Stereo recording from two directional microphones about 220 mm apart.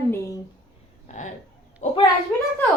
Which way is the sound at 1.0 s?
35° left (ahead or behind).